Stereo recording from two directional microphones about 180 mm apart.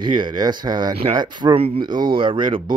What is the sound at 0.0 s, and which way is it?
Speech, 25° right (ahead or behind).